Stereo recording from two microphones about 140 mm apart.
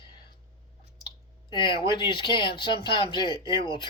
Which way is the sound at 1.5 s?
35° left (ahead or behind).